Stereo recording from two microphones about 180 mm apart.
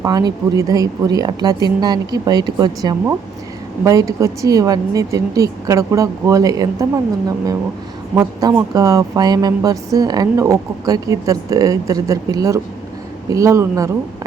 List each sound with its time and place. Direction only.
0.0 s a woman's voice: 20° right (ahead or behind)